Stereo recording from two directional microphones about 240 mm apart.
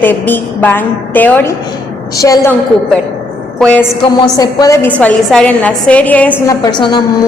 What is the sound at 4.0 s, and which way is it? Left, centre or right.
A woman's voice, centre.